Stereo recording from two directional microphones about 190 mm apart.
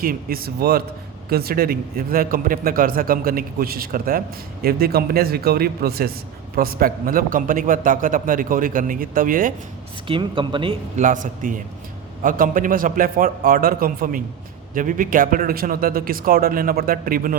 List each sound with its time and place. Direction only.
0.0 s a man's voice: 50° right (ahead or behind)
10.1 s speech: 25° right (ahead or behind)
10.9 s a man's voice: 40° right (ahead or behind)